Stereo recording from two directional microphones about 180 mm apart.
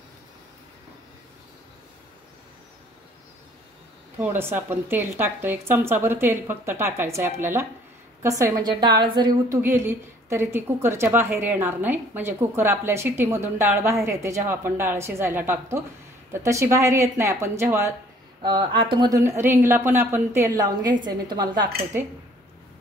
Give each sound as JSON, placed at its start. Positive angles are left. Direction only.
{"t": 4.2, "sound": "a woman's voice", "side_deg": -10}
{"t": 9.6, "sound": "a woman's voice", "side_deg": -10}